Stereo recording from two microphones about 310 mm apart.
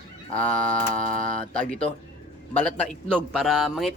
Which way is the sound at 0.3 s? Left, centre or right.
Centre.